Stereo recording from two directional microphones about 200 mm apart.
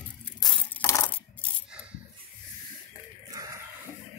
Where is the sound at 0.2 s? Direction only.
5° left (ahead or behind).